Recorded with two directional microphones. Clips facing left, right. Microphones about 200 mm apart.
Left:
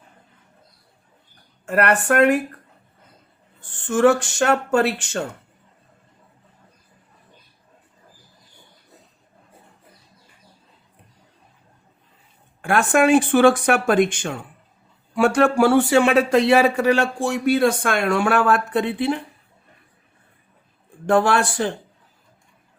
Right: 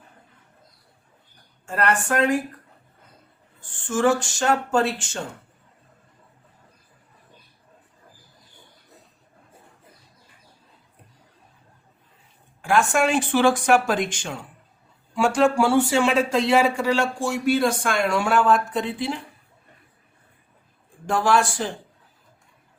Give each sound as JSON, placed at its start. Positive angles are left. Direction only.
{"t": 1.6, "sound": "speech", "side_deg": 65}
{"t": 3.6, "sound": "speech", "side_deg": 60}
{"t": 12.6, "sound": "speech", "side_deg": 55}
{"t": 21.1, "sound": "speech", "side_deg": 60}